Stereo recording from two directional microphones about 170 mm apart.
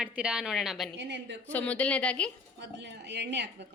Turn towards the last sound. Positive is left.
turn(degrees=-90)